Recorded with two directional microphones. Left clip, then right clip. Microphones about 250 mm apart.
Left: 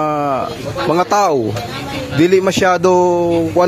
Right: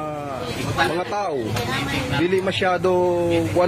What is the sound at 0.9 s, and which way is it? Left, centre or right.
Speech, left.